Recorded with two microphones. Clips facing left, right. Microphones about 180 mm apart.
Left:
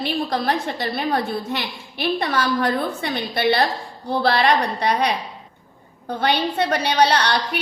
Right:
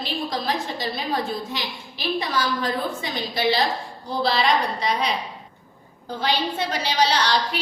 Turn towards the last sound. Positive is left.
turn(degrees=60)  # may be behind; listen again after turning